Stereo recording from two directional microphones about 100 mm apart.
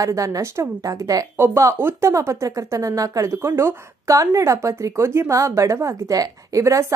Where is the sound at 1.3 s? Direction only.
25° right (ahead or behind).